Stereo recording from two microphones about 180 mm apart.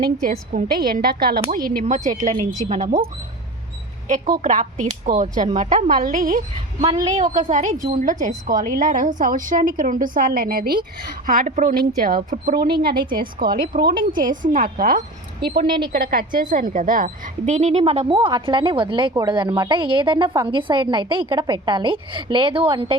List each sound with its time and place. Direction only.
0.2 s a woman's voice: 50° right (ahead or behind)
4.1 s speech: 45° right (ahead or behind)
6.8 s a woman's voice: 25° right (ahead or behind)
7.4 s a woman's voice: 40° right (ahead or behind); by 15.6 s 60° right (ahead or behind)
15.6 s a woman's voice: 25° right (ahead or behind)
15.9 s a woman's voice: 55° right (ahead or behind); by 23.0 s 30° right (ahead or behind)